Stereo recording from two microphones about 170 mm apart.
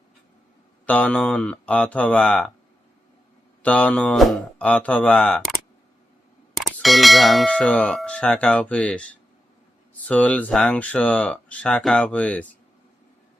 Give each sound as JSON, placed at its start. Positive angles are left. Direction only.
{"t": 0.9, "sound": "speech", "side_deg": 10}
{"t": 3.6, "sound": "speech", "side_deg": 10}
{"t": 6.6, "sound": "speech", "side_deg": 0}
{"t": 10.1, "sound": "speech", "side_deg": 10}